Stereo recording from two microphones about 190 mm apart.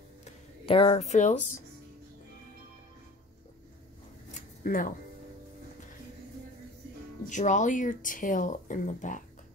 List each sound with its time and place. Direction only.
0.2 s music: 30° left (ahead or behind)
4.3 s a sound: 45° left (ahead or behind)
7.2 s speech: 40° left (ahead or behind)